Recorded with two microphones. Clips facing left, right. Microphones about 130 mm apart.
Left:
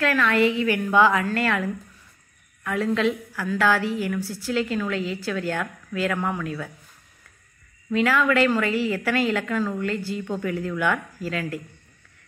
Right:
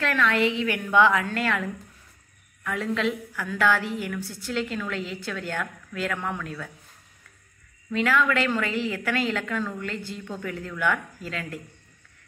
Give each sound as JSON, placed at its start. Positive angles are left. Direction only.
{"t": 0.0, "sound": "a woman's voice", "side_deg": 5}
{"t": 7.9, "sound": "a woman's voice", "side_deg": 5}